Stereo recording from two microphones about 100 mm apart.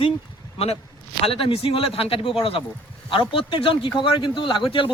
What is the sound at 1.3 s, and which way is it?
Speech, 70° left (ahead or behind).